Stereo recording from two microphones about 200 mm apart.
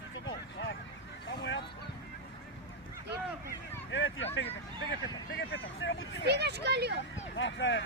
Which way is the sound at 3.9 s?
70° left (ahead or behind).